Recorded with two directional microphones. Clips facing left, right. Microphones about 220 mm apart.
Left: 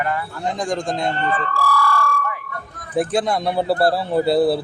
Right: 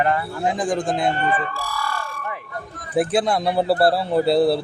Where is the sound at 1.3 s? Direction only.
20° right (ahead or behind).